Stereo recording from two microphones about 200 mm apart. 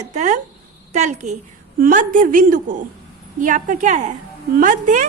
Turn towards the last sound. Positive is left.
turn(degrees=-40)  # may be behind; listen again after turning